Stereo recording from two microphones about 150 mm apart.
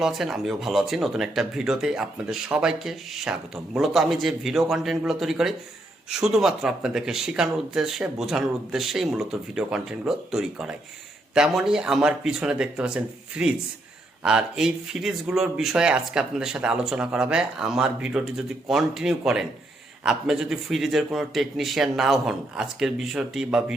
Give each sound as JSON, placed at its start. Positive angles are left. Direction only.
{"t": 0.0, "sound": "speech", "side_deg": 0}